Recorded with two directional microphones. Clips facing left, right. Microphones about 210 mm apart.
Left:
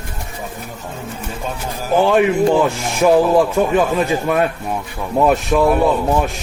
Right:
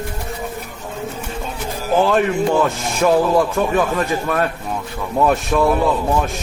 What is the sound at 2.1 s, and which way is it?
A man's voice, 15° left (ahead or behind).